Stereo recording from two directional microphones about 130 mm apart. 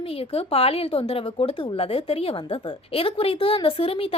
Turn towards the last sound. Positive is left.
turn(degrees=45)  # may be behind; listen again after turning